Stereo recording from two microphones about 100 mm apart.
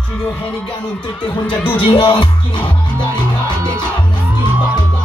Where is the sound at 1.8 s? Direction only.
55° left (ahead or behind).